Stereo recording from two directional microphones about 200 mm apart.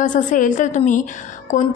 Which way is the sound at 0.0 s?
40° left (ahead or behind).